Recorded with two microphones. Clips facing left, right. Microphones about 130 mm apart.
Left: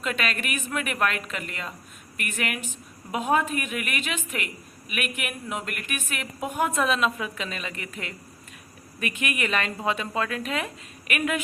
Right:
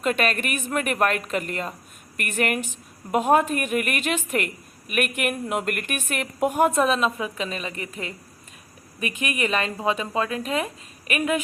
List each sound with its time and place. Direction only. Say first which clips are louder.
0.0 s a woman's voice: right 6 dB; 45° right (ahead or behind)
6.7 s a woman's voice: right 3 dB; 30° right (ahead or behind)